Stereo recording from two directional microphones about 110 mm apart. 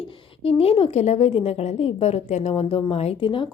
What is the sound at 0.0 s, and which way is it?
A woman's voice, 55° left (ahead or behind).